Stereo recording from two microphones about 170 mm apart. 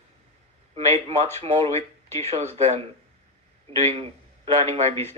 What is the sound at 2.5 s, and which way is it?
Speech, 40° right (ahead or behind).